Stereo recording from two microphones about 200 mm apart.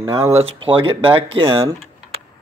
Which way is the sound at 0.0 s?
15° right (ahead or behind).